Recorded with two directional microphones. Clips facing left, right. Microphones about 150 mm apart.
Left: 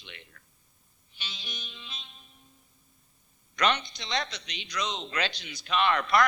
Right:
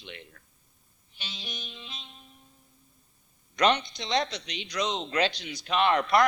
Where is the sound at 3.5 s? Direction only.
30° right (ahead or behind).